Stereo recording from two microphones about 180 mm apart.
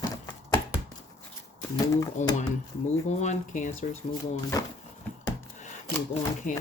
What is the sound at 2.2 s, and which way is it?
Speech, 40° left (ahead or behind).